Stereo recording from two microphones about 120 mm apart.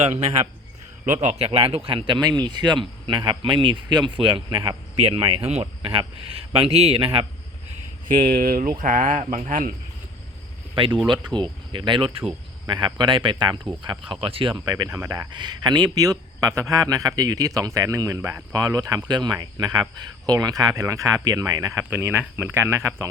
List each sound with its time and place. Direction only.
0.0 s speech: 60° right (ahead or behind)
1.0 s speech: 80° right; by 4.8 s 40° right (ahead or behind)
4.9 s speech: 55° right (ahead or behind)
7.7 s a sound: 75° right (ahead or behind)
8.8 s speech: 90° right
10.8 s a man's voice: 45° right (ahead or behind)
14.6 s speech: 30° right (ahead or behind)
15.4 s a man's voice: 40° right (ahead or behind)
21.8 s speech: 20° right (ahead or behind)